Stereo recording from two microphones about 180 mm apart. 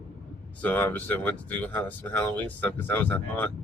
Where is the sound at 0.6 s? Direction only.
10° left (ahead or behind).